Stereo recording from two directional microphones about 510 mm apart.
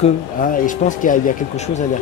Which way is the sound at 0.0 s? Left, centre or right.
Centre.